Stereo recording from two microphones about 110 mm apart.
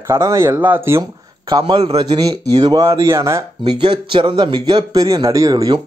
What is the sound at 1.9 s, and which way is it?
A man's voice, 35° right (ahead or behind).